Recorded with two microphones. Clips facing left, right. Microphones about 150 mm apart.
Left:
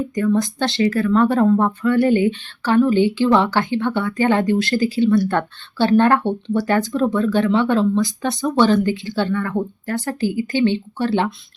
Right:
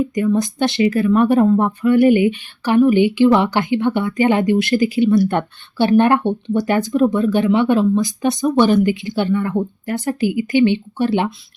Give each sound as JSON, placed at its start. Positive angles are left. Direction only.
{"t": 0.3, "sound": "speech", "side_deg": -20}